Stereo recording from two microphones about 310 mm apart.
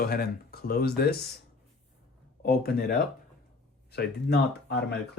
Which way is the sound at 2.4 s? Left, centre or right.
Left.